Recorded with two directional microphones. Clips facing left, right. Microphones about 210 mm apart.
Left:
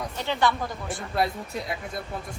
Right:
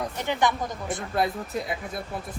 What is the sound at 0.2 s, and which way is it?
Speech, 15° right (ahead or behind).